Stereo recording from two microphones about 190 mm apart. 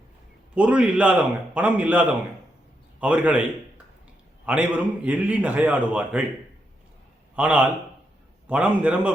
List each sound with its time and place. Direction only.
0.5 s a man's voice: 5° right (ahead or behind)
4.4 s a man's voice: 5° right (ahead or behind)
7.3 s a man's voice: 5° right (ahead or behind)